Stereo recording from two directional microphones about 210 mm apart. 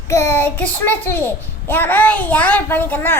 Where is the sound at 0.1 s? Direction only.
10° left (ahead or behind).